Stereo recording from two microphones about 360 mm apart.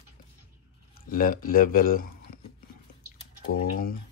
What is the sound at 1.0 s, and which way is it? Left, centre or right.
Speech, left.